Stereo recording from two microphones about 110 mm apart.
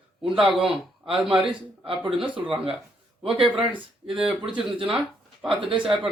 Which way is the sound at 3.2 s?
55° right (ahead or behind).